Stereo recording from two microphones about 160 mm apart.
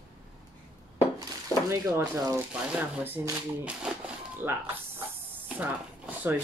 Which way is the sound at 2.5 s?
10° right (ahead or behind).